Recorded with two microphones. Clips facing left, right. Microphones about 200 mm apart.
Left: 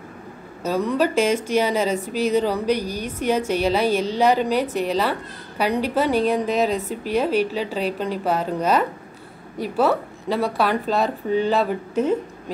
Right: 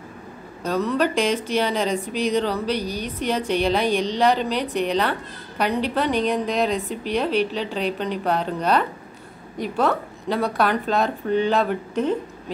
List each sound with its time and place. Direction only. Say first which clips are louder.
0.6 s a woman's voice: left 1 dB; 10° left (ahead or behind)